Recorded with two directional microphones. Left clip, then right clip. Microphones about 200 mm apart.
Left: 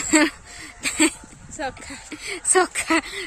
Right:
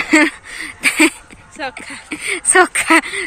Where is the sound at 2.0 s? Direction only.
Centre (ahead or behind).